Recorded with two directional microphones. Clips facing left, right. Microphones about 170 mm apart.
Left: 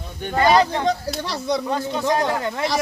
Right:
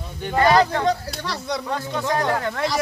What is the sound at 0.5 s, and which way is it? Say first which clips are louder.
Speech: left 1 dB; 20° left (ahead or behind).